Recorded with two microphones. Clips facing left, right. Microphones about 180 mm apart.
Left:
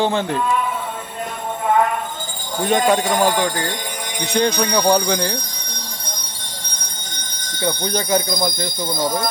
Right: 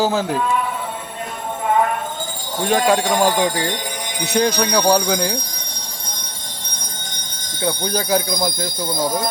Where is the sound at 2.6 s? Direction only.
Centre (ahead or behind).